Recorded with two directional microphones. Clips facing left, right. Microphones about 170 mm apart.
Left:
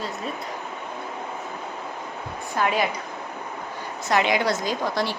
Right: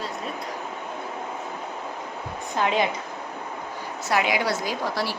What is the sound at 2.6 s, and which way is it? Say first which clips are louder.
Speech: even; 20° right (ahead or behind).